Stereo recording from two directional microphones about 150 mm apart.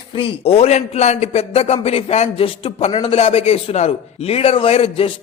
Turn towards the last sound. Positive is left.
turn(degrees=40)  # may be behind; listen again after turning